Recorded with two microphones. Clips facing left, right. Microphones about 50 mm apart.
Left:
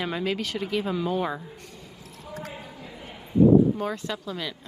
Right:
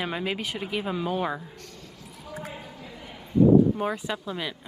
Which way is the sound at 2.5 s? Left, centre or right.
Centre.